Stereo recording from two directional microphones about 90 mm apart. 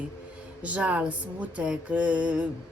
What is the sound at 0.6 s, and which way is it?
Speech, 15° right (ahead or behind).